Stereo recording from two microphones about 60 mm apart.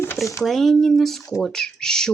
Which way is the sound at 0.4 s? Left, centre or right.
Centre.